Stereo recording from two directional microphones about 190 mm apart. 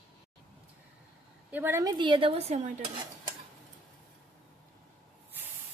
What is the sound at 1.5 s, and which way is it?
A woman's voice, 10° right (ahead or behind).